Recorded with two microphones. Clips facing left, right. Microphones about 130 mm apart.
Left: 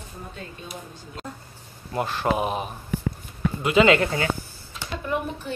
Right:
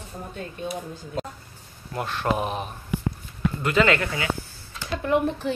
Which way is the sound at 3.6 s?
15° left (ahead or behind).